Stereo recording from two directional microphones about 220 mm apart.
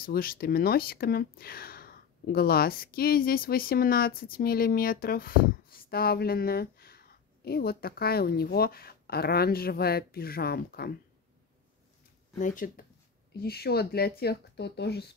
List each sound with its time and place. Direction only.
0.0 s speech: 40° left (ahead or behind)
12.4 s speech: 35° left (ahead or behind)